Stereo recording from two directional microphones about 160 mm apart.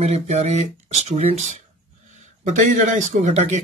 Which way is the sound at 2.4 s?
50° right (ahead or behind).